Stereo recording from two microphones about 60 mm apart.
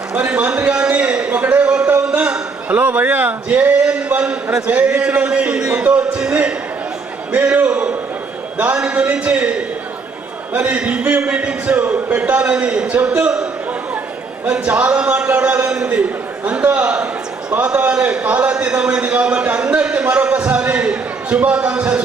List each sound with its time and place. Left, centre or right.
0.1 s speech: right
0.7 s a sound: centre
2.0 s a man's voice: centre